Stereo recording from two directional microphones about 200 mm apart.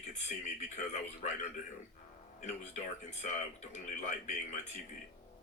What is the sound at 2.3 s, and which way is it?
Speech, 35° left (ahead or behind).